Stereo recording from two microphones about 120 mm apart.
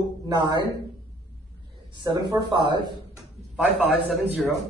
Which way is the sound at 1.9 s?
35° right (ahead or behind).